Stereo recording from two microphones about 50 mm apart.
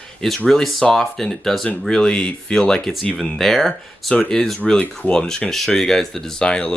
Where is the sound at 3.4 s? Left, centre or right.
Centre.